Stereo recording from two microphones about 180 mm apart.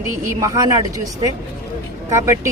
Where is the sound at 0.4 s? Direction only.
20° right (ahead or behind).